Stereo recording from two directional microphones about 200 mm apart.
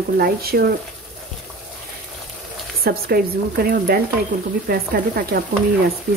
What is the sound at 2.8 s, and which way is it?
A woman's voice, 50° right (ahead or behind).